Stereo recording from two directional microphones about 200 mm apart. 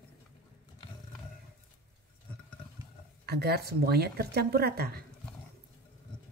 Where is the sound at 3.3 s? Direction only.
55° right (ahead or behind).